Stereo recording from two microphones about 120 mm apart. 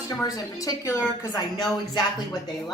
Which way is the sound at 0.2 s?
30° left (ahead or behind).